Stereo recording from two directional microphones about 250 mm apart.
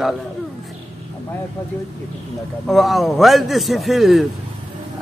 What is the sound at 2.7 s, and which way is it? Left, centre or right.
A man's voice, centre.